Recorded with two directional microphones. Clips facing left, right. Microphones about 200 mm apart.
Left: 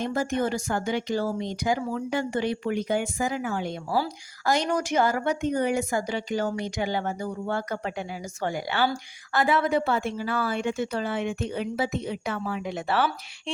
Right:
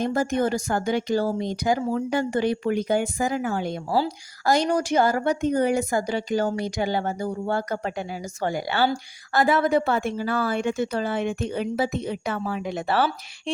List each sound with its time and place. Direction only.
0.0 s a woman's voice: 40° right (ahead or behind)